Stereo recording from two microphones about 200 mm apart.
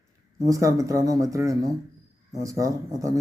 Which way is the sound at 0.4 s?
15° right (ahead or behind).